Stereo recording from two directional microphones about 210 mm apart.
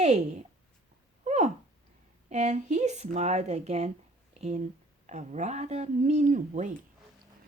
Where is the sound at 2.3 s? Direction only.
35° right (ahead or behind).